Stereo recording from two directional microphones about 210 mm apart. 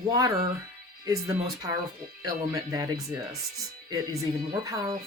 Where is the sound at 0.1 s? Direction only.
15° right (ahead or behind).